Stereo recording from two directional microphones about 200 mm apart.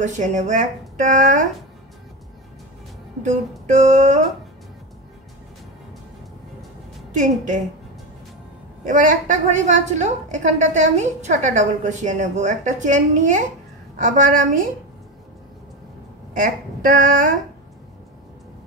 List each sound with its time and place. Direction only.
0.0 s a woman's voice: 35° right (ahead or behind)
3.6 s a woman's voice: 35° right (ahead or behind)
7.2 s a woman's voice: 40° right (ahead or behind)
8.8 s a woman's voice: 40° right (ahead or behind)
16.3 s a woman's voice: 40° right (ahead or behind)